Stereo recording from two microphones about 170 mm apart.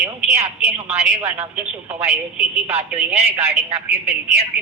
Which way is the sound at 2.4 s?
5° right (ahead or behind).